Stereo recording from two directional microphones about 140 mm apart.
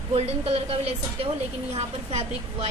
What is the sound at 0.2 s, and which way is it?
A woman's voice, 45° right (ahead or behind).